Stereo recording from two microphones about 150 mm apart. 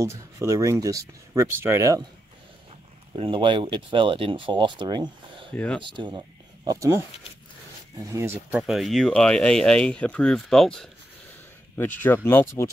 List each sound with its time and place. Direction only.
0.0 s speech: 20° right (ahead or behind)
3.2 s speech: 35° right (ahead or behind)
5.5 s speech: 10° left (ahead or behind)
5.9 s speech: 30° right (ahead or behind)
8.6 s speech: centre (ahead or behind)
12.0 s speech: 10° left (ahead or behind)